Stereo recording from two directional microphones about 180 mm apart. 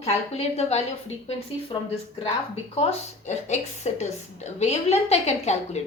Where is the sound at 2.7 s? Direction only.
35° left (ahead or behind).